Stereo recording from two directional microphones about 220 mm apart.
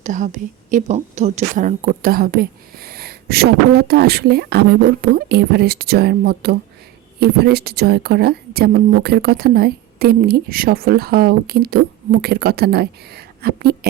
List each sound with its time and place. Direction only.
0.0 s a woman's voice: 35° right (ahead or behind)